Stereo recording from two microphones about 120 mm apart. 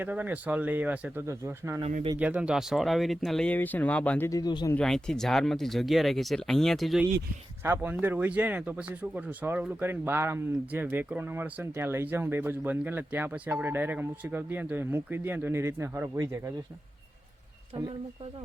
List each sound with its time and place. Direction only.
0.0 s speech: 15° right (ahead or behind)
2.1 s speech: 10° right (ahead or behind); by 4.3 s 10° left (ahead or behind)
4.3 s a man's voice: 35° left (ahead or behind)
4.7 s speech: 5° left (ahead or behind)
7.6 s speech: 20° right (ahead or behind)